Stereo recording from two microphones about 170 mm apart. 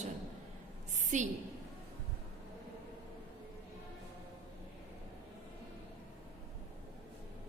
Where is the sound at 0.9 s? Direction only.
45° right (ahead or behind).